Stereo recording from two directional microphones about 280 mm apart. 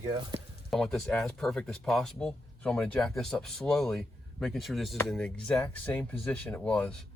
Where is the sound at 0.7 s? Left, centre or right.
Centre.